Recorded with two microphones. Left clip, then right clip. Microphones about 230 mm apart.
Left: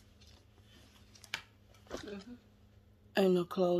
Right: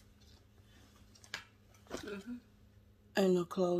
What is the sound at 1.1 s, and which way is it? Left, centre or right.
Tick-tock, left.